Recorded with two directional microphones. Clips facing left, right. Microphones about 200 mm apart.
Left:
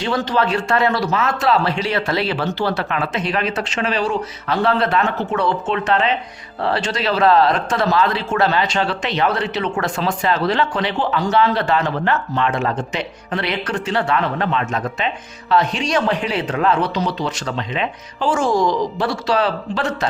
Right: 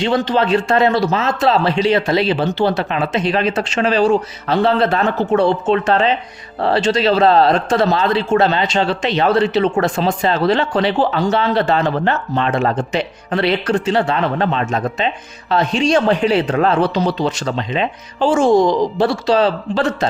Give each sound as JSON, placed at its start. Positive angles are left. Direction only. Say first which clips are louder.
{"t": 0.0, "sound": "speech", "louder": "right 3 dB", "side_deg": -25}